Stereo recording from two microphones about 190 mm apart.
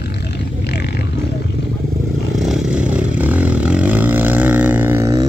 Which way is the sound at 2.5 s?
5° right (ahead or behind).